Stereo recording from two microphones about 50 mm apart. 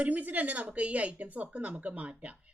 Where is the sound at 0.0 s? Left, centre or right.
Right.